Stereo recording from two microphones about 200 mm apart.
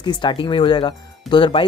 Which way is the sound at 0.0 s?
25° left (ahead or behind).